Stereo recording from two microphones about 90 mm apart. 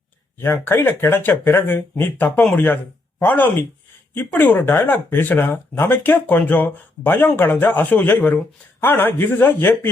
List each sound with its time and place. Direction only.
0.4 s speech: 25° left (ahead or behind)